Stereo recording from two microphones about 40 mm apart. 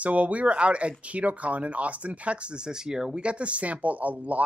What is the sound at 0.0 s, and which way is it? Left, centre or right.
Speech, right.